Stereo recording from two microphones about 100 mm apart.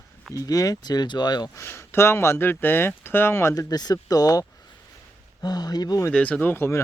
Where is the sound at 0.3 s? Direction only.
35° left (ahead or behind).